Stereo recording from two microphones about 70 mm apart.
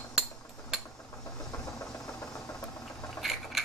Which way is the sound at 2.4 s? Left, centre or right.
Left.